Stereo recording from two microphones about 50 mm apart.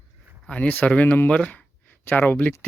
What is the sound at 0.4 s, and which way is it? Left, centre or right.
Speech, left.